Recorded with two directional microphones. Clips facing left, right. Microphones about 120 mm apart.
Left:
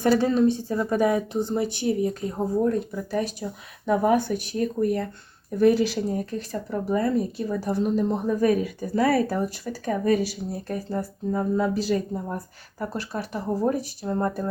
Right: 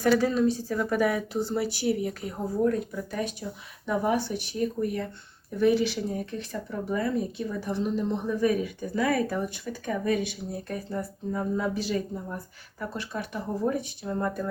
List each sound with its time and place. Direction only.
0.2 s speech: 25° left (ahead or behind)
3.8 s speech: 50° left (ahead or behind)